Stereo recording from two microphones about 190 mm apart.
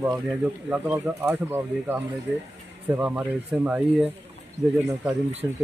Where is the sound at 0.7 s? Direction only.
10° right (ahead or behind).